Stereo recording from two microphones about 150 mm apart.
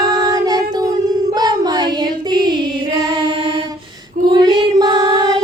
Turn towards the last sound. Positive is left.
turn(degrees=-25)  # may be behind; listen again after turning